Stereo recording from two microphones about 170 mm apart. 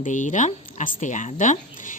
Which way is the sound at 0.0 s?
45° left (ahead or behind).